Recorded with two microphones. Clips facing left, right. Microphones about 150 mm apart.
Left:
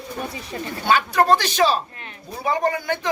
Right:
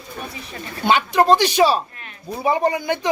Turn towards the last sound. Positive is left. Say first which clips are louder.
# right 2 dB
turn(degrees=-15)  # may be behind; listen again after turning